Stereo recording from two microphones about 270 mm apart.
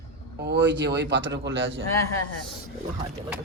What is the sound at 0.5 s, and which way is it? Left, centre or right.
Speech, right.